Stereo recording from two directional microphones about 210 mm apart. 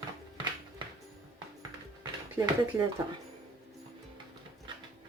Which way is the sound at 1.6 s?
20° right (ahead or behind).